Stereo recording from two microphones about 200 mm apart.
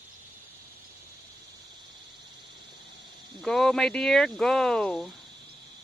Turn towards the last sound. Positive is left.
turn(degrees=0)  # may be behind; listen again after turning